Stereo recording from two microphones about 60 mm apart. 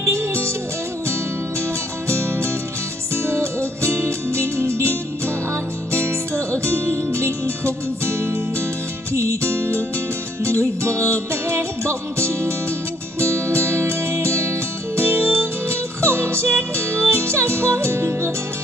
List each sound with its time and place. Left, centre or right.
0.0 s music: right
2.0 s music: right